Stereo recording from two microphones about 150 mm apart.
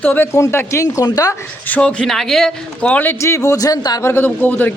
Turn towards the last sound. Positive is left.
turn(degrees=10)  # may be behind; listen again after turning